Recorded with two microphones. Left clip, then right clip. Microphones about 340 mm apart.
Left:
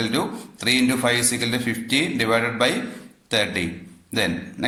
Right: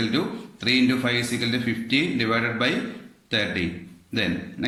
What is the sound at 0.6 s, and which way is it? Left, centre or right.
A man's voice, centre.